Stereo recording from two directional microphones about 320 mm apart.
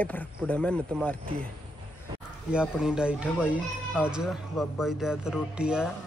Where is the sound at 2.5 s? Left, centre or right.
Centre.